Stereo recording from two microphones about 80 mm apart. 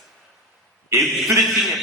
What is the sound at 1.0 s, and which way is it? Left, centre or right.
Speech, centre.